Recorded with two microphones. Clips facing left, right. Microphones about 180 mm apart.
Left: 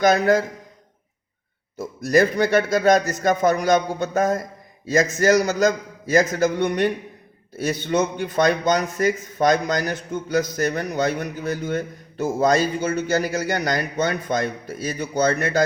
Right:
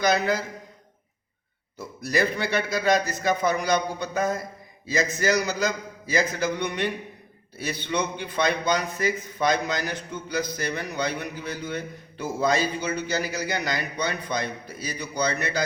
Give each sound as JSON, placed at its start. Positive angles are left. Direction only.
{"t": 0.0, "sound": "a man's voice", "side_deg": 50}
{"t": 1.8, "sound": "a man's voice", "side_deg": 45}